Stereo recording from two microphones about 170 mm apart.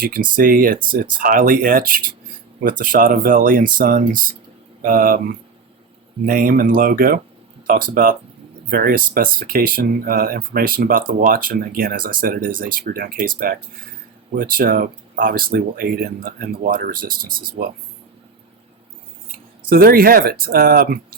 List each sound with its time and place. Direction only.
0.0 s speech: 60° right (ahead or behind)
19.6 s speech: 60° right (ahead or behind)